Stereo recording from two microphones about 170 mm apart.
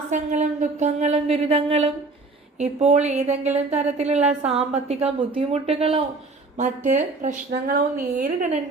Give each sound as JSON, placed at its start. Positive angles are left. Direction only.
{"t": 0.1, "sound": "speech", "side_deg": -50}
{"t": 7.5, "sound": "a woman's voice", "side_deg": -60}